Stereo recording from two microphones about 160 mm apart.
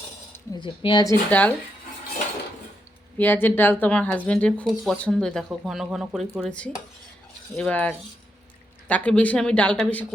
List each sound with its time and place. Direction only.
0.6 s speech: 30° left (ahead or behind)
1.3 s speech: 10° left (ahead or behind)
3.2 s speech: 10° left (ahead or behind)
7.5 s speech: 5° left (ahead or behind)